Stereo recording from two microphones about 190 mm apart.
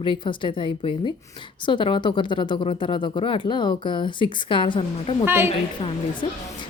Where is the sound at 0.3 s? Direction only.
25° left (ahead or behind).